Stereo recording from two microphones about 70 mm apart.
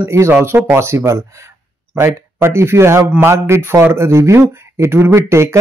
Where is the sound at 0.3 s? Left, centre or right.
Right.